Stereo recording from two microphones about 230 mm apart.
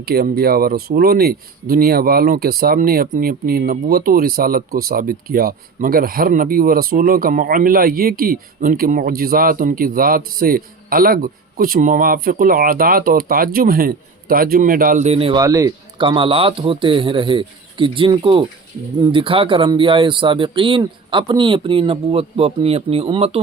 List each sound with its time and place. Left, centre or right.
0.0 s speech: right